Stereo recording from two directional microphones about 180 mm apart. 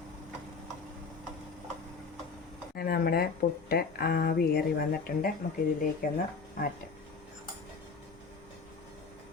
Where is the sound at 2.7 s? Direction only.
60° left (ahead or behind).